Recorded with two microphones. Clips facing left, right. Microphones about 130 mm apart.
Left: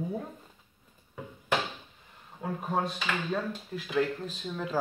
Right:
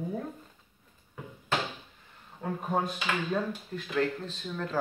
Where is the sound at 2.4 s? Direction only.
Centre (ahead or behind).